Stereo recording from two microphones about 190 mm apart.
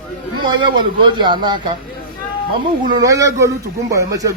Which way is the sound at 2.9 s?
20° right (ahead or behind).